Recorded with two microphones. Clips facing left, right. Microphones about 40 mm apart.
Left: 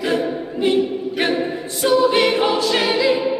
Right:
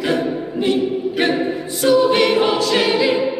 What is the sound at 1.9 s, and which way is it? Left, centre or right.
Choir, centre.